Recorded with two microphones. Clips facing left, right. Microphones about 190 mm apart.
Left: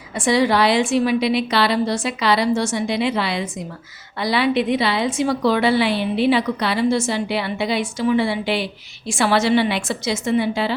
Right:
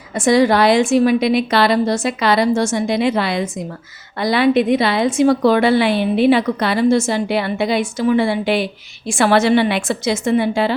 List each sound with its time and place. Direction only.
0.2 s a woman's voice: 45° right (ahead or behind)